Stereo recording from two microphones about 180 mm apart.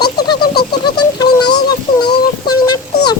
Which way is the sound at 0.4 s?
60° left (ahead or behind).